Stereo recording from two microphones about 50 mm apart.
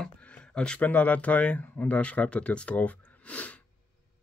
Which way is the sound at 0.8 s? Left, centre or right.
Left.